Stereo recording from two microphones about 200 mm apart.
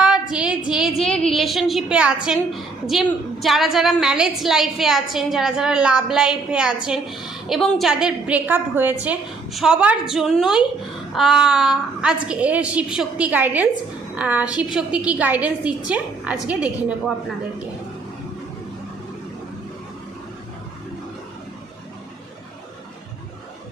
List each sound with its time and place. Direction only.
0.0 s a woman's voice: 5° right (ahead or behind)